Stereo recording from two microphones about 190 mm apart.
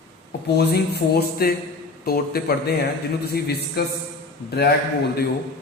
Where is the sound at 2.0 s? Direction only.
50° left (ahead or behind).